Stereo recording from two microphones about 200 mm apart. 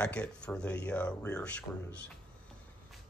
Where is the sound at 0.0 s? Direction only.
5° left (ahead or behind).